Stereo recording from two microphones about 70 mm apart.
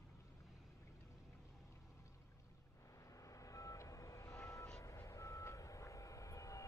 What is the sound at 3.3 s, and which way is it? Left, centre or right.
Vehicle, left.